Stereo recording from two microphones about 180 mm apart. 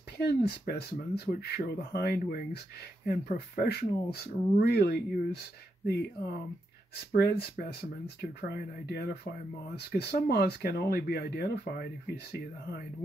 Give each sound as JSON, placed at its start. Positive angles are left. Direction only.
{"t": 0.2, "sound": "speech", "side_deg": 60}
{"t": 7.1, "sound": "speech", "side_deg": 60}